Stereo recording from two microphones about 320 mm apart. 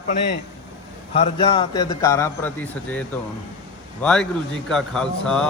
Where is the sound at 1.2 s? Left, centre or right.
Centre.